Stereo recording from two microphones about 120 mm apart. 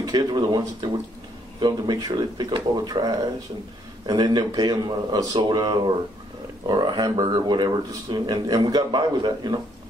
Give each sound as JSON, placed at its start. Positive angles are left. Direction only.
{"t": 0.0, "sound": "speech", "side_deg": -35}